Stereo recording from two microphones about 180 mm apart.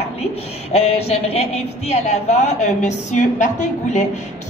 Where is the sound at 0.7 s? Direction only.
35° left (ahead or behind).